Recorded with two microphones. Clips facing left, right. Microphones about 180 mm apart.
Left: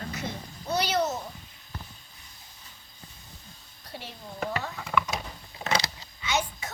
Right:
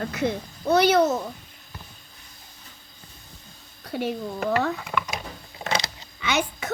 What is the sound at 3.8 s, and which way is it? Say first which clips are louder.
Child singing: right 15 dB; 60° right (ahead or behind).